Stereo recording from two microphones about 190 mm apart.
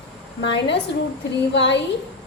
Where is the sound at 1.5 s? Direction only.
65° left (ahead or behind).